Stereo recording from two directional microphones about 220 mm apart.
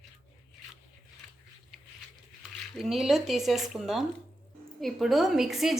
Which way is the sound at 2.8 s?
Centre (ahead or behind).